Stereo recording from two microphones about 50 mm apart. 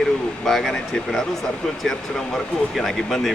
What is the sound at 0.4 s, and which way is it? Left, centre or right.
Speech, centre.